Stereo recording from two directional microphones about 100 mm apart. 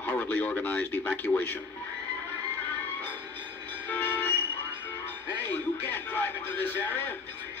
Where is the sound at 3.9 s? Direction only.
20° left (ahead or behind).